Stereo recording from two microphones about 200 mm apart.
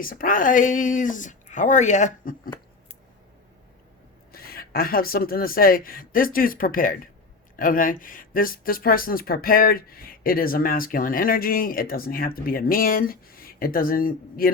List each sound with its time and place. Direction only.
0.0 s speech: 45° left (ahead or behind)
4.3 s speech: 50° left (ahead or behind)